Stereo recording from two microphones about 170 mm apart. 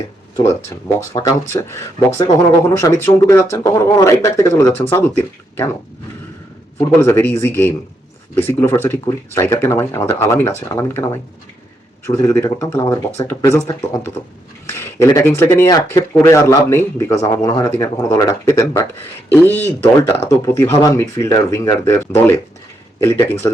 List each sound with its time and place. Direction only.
0.4 s speech: 20° left (ahead or behind)
6.7 s speech: 15° left (ahead or behind)